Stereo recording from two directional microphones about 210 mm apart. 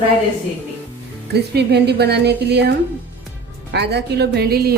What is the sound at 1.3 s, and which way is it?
A woman's voice, 50° right (ahead or behind).